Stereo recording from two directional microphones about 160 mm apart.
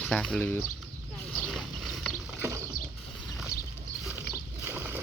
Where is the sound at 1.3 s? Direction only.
Centre (ahead or behind).